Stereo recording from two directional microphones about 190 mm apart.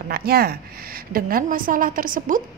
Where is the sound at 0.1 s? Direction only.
55° right (ahead or behind).